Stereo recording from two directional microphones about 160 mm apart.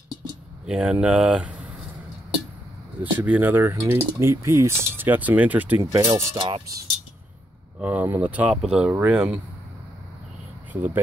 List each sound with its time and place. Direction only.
0.7 s speech: 5° right (ahead or behind)
3.0 s speech: 10° right (ahead or behind)
6.3 s speech: 35° right (ahead or behind)
7.8 s speech: 10° right (ahead or behind)
10.7 s speech: 10° right (ahead or behind)